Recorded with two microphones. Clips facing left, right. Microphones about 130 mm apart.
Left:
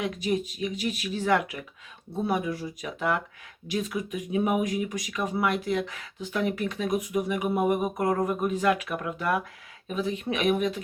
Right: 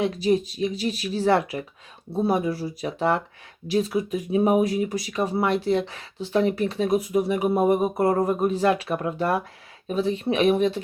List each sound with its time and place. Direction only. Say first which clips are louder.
0.0 s speech: right 6 dB; 35° right (ahead or behind)